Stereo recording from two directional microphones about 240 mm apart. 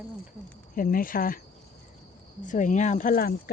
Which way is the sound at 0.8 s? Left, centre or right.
Left.